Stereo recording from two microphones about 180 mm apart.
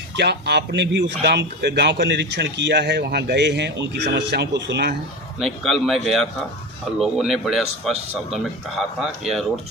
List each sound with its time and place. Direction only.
0.2 s a man's voice: 70° right (ahead or behind)
5.4 s speech: centre (ahead or behind)